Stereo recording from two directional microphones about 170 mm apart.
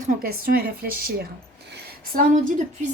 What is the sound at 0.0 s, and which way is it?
A woman's voice, 50° right (ahead or behind).